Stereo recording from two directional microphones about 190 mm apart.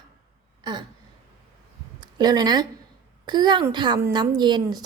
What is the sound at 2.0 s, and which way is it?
A woman's voice, 20° right (ahead or behind).